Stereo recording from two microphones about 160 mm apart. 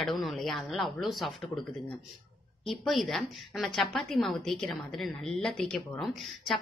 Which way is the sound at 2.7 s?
Centre (ahead or behind).